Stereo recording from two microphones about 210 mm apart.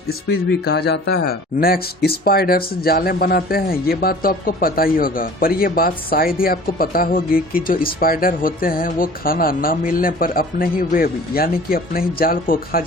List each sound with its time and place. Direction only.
0.1 s speech: 50° left (ahead or behind)